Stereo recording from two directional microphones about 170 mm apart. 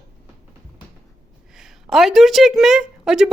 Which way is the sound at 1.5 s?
5° right (ahead or behind).